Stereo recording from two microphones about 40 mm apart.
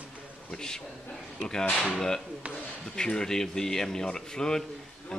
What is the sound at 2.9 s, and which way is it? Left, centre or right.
Speech, centre.